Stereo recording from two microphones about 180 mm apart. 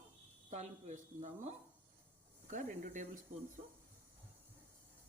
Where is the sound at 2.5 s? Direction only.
45° right (ahead or behind).